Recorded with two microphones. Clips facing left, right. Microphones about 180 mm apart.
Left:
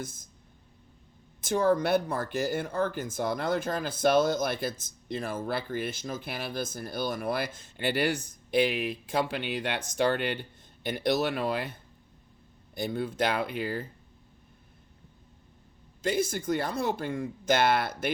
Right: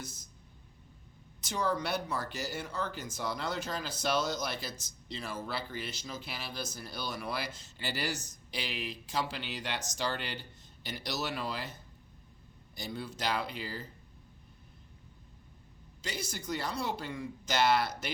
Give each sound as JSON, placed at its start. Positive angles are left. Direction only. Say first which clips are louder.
{"t": 0.0, "sound": "speech", "louder": "left 7 dB", "side_deg": 50}
{"t": 1.4, "sound": "speech", "louder": "left 8 dB", "side_deg": 50}
{"t": 16.0, "sound": "speech", "louder": "left 12 dB", "side_deg": 50}